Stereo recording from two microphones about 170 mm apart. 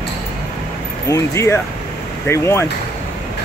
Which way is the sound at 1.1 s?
20° left (ahead or behind).